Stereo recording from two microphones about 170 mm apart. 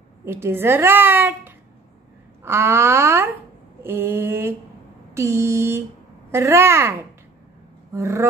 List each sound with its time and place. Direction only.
0.2 s a woman's voice: 15° right (ahead or behind)